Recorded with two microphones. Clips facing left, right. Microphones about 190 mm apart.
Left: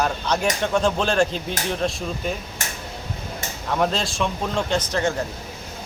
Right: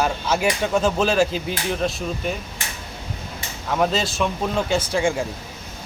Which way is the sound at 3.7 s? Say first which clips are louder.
Right 2 dB; centre (ahead or behind).